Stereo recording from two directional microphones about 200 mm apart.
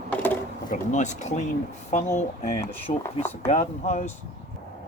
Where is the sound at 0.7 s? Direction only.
35° left (ahead or behind).